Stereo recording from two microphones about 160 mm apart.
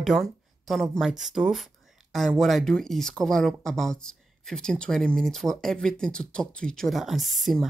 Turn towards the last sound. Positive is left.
turn(degrees=0)  # may be behind; listen again after turning